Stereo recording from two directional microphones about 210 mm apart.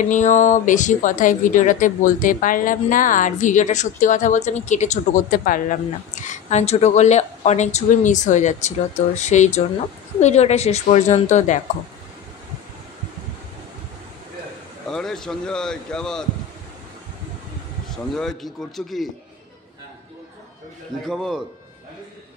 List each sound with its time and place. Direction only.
0.0 s speech: 35° left (ahead or behind)
14.9 s speech: centre (ahead or behind)
18.1 s speech: centre (ahead or behind)
21.0 s speech: centre (ahead or behind)